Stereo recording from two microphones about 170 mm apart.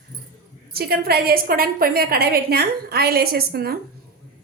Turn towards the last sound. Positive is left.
turn(degrees=-65)  # may be behind; listen again after turning